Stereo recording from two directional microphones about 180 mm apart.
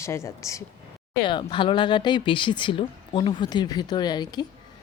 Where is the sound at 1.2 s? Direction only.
25° left (ahead or behind).